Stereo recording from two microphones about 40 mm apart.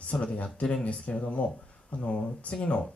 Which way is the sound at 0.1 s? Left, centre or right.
Left.